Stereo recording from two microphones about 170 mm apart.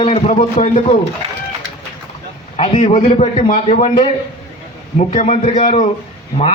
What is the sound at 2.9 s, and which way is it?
A man's voice, 45° left (ahead or behind).